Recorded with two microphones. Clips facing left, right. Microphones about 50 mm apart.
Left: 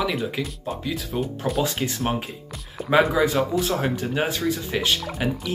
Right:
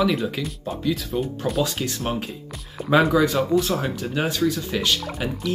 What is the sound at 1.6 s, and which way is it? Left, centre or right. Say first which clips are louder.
Speech: left 1 dB; centre.